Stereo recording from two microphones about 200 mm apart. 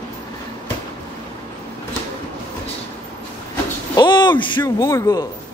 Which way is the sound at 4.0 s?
20° left (ahead or behind).